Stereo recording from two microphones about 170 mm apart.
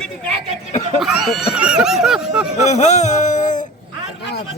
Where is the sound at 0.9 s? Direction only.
Centre (ahead or behind).